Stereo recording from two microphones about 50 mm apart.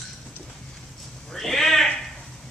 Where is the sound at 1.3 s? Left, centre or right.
Centre.